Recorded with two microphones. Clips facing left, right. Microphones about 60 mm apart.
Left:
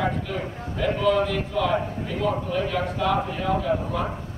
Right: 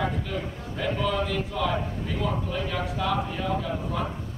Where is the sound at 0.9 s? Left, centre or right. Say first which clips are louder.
Left 6 dB; centre.